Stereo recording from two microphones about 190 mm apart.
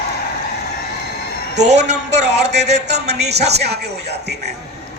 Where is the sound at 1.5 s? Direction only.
65° right (ahead or behind).